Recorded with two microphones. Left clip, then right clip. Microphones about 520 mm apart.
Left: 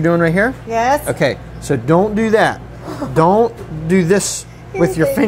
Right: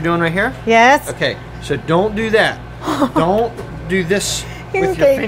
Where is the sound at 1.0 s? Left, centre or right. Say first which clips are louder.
Left 3 dB; centre.